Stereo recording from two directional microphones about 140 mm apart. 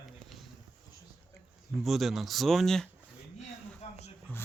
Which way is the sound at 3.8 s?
50° left (ahead or behind).